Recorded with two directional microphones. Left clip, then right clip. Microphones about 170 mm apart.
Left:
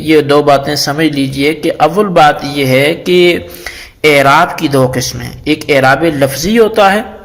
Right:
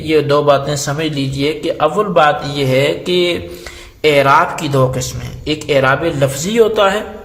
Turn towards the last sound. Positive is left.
turn(degrees=30)  # may be behind; listen again after turning